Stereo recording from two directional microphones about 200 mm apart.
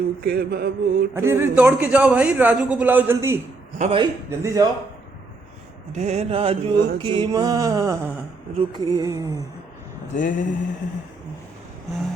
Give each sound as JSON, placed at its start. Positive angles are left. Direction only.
{"t": 0.2, "sound": "mantra", "side_deg": -50}
{"t": 1.1, "sound": "a man's voice", "side_deg": -10}
{"t": 3.8, "sound": "mantra", "side_deg": -30}
{"t": 4.3, "sound": "a man's voice", "side_deg": -15}
{"t": 5.9, "sound": "mantra", "side_deg": -35}
{"t": 9.0, "sound": "a man's voice", "side_deg": -15}
{"t": 10.2, "sound": "mantra", "side_deg": 40}